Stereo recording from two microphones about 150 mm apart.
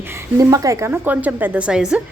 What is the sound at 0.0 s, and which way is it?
Speech, 15° right (ahead or behind).